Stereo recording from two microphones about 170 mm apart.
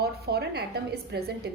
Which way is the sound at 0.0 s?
70° right (ahead or behind).